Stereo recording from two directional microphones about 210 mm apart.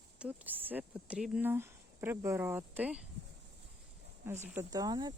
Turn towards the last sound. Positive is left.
turn(degrees=-20)  # may be behind; listen again after turning